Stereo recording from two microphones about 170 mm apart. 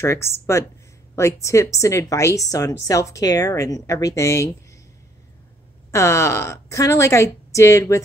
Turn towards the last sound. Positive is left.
turn(degrees=15)  # may be behind; listen again after turning